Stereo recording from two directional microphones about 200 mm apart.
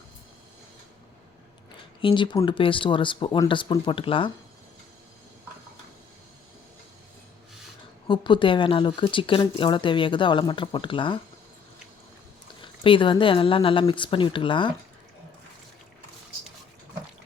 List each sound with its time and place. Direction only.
2.0 s speech: 25° left (ahead or behind)
8.0 s speech: 25° left (ahead or behind)
12.6 s speech: 25° left (ahead or behind)